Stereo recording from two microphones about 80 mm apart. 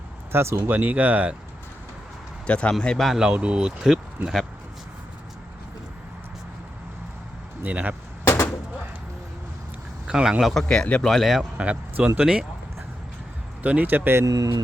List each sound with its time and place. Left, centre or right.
0.3 s speech: right
2.5 s speech: centre
3.1 s speech: centre
7.6 s speech: centre
10.1 s speech: centre
10.6 s speech: centre
11.1 s speech: centre
11.5 s speech: centre
13.6 s speech: centre
14.3 s speech: right